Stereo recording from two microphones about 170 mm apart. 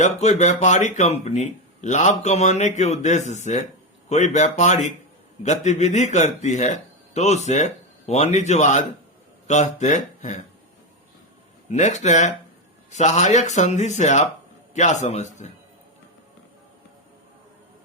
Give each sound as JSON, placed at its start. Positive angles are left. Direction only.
{"t": 0.0, "sound": "speech", "side_deg": 40}
{"t": 11.7, "sound": "speech", "side_deg": 45}